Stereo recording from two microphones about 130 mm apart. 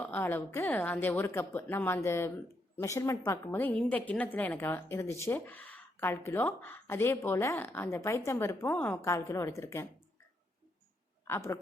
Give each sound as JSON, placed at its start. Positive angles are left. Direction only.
{"t": 0.0, "sound": "a woman's voice", "side_deg": 15}
{"t": 11.3, "sound": "speech", "side_deg": 20}